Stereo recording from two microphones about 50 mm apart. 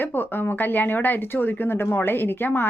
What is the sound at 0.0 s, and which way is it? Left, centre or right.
A woman's voice, left.